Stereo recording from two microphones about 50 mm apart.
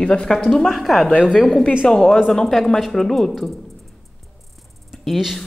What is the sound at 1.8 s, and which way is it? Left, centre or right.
A woman's voice, centre.